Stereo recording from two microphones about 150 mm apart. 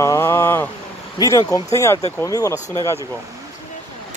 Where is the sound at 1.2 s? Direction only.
20° left (ahead or behind).